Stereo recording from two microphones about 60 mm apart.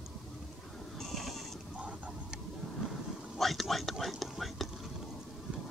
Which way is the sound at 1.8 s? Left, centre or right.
Centre.